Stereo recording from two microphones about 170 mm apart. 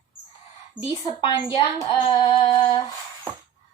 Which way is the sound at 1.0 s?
25° left (ahead or behind).